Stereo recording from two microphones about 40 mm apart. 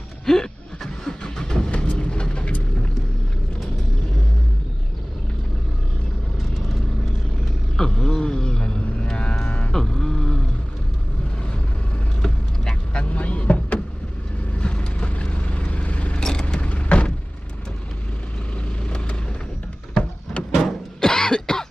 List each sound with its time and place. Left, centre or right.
0.2 s a sound: centre
1.2 s vehicle: centre
7.7 s music: centre
9.7 s a sound: centre
12.9 s vehicle: left
16.2 s vehicle: centre
16.6 s vehicle: left
18.9 s vehicle: left
20.0 s a sound: left
20.6 s cough: centre